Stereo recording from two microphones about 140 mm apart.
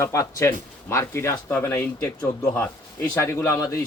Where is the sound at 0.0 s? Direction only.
20° left (ahead or behind).